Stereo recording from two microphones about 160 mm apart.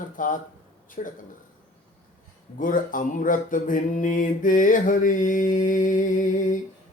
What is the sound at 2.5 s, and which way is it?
Mantra, 55° left (ahead or behind).